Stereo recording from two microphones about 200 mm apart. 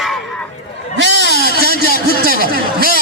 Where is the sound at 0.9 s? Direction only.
65° right (ahead or behind).